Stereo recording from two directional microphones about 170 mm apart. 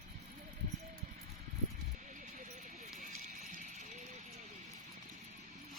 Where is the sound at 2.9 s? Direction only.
50° right (ahead or behind).